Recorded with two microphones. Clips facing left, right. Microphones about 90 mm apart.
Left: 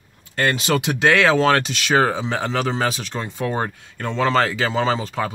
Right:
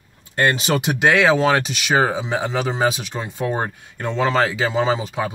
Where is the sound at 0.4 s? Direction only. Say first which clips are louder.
Right 1 dB; 20° right (ahead or behind).